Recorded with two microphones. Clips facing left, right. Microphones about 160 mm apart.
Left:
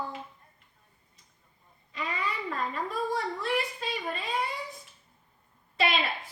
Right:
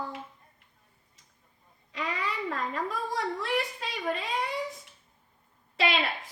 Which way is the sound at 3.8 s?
90° right.